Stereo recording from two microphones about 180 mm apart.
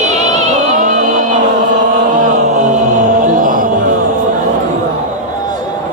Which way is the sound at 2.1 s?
45° right (ahead or behind).